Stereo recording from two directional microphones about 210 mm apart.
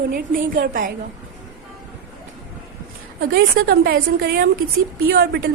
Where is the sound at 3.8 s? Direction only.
50° right (ahead or behind).